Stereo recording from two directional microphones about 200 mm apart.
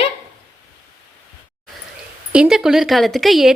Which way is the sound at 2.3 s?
5° right (ahead or behind).